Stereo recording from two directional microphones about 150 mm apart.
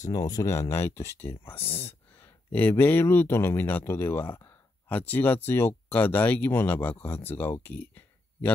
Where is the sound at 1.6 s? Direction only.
40° left (ahead or behind).